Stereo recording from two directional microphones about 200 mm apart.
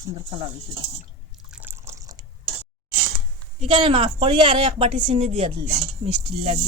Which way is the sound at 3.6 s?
25° right (ahead or behind).